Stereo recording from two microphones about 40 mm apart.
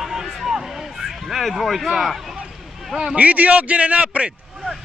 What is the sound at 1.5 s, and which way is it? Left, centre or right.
Speech, centre.